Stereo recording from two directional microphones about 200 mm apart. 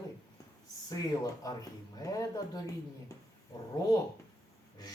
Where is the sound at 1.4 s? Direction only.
20° left (ahead or behind).